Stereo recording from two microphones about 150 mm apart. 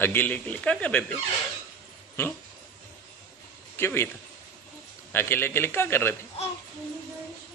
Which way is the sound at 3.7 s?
15° left (ahead or behind).